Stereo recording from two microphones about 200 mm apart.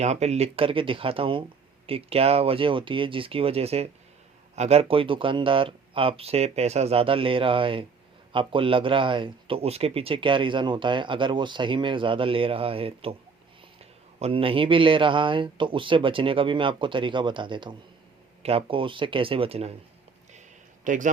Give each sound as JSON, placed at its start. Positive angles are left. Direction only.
{"t": 0.0, "sound": "a man's voice", "side_deg": -35}
{"t": 14.2, "sound": "a man's voice", "side_deg": -30}
{"t": 20.8, "sound": "a man's voice", "side_deg": -40}